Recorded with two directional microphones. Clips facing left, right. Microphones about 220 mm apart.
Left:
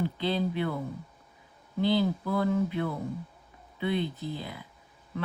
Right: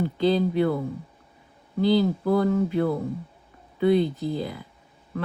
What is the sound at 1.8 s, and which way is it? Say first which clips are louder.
Speech: right 5 dB; 40° right (ahead or behind).